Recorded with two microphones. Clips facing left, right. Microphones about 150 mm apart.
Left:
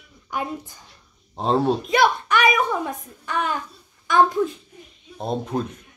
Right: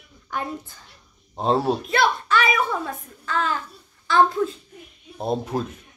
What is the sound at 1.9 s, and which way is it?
A child's voice, 15° left (ahead or behind).